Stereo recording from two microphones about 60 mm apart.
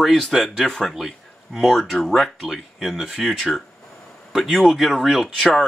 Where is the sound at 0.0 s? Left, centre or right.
Centre.